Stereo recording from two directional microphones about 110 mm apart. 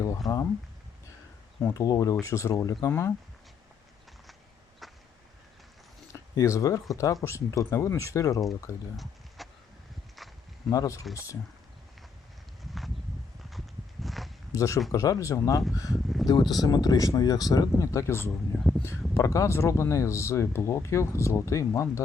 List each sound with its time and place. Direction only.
0.2 s speech: 35° left (ahead or behind)
1.6 s speech: 30° left (ahead or behind)
4.8 s vehicle: centre (ahead or behind)
6.1 s speech: 30° left (ahead or behind)
9.4 s a sound: centre (ahead or behind)
10.2 s walk: centre (ahead or behind)
10.7 s speech: 30° left (ahead or behind)
14.0 s walk: centre (ahead or behind)
14.5 s speech: 30° left (ahead or behind)